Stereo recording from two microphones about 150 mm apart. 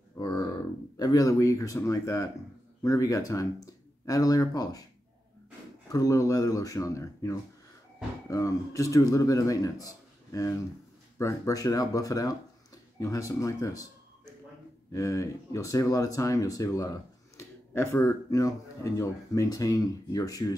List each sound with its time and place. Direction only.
0.2 s a sound: 30° left (ahead or behind)
0.9 s speech: 25° left (ahead or behind)
5.9 s speech: 25° left (ahead or behind)